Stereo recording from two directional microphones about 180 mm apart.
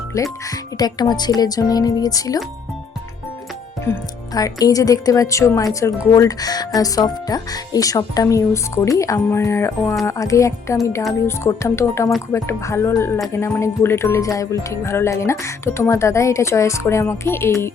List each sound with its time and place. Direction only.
0.1 s speech: 20° left (ahead or behind)
4.4 s speech: 20° left (ahead or behind)